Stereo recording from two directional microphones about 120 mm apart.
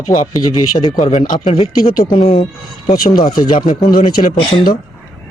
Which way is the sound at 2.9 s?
35° left (ahead or behind).